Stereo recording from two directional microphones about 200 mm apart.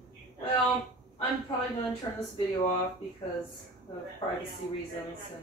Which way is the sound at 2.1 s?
20° left (ahead or behind).